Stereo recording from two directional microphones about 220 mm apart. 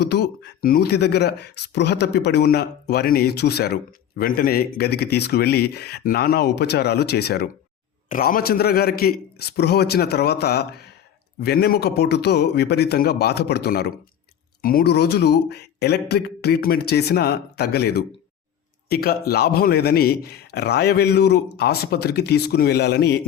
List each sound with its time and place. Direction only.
0.0 s a man's voice: 50° left (ahead or behind)